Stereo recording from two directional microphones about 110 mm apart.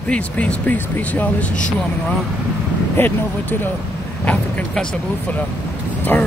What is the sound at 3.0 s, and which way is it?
Speech, 20° left (ahead or behind).